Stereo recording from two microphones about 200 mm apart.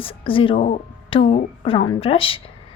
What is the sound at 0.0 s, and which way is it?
A woman's voice, 25° left (ahead or behind).